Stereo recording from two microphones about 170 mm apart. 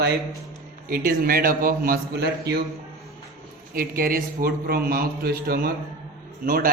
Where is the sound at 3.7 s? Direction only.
60° right (ahead or behind).